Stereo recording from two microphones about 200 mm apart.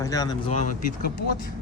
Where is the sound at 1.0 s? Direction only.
50° left (ahead or behind).